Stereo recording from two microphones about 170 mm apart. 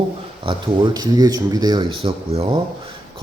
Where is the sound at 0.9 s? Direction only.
20° right (ahead or behind).